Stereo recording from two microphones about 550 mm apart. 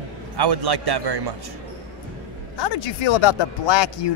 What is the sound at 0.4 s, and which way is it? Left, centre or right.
Speech, right.